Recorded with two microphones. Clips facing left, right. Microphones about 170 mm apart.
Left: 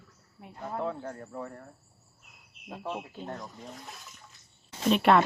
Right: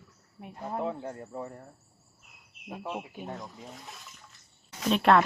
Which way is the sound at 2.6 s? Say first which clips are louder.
Even; 10° right (ahead or behind).